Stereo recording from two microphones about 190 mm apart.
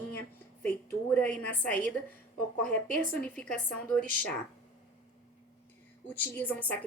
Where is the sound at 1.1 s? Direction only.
5° left (ahead or behind).